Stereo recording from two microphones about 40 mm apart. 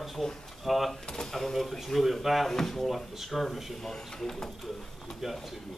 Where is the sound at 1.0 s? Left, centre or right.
Centre.